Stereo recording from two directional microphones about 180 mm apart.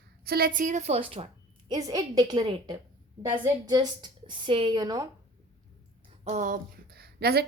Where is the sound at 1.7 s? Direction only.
20° right (ahead or behind).